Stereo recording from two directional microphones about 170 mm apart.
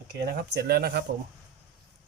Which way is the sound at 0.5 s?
70° right (ahead or behind).